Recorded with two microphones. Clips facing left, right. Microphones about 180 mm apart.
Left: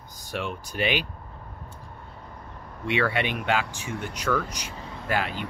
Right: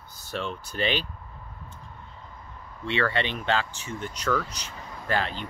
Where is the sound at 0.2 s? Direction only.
10° left (ahead or behind).